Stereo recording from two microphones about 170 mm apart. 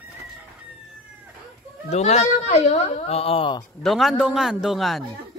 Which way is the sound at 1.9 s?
40° left (ahead or behind).